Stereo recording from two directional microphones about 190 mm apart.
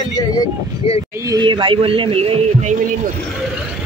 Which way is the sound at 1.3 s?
25° right (ahead or behind).